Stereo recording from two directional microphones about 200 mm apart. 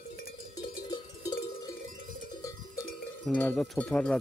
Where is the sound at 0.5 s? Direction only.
20° left (ahead or behind).